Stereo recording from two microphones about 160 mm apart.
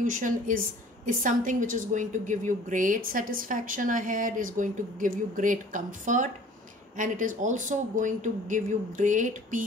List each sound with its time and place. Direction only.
0.0 s a woman's voice: 55° right (ahead or behind)